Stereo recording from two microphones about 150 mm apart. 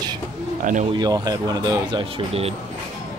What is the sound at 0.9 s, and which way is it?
Speech, 25° right (ahead or behind).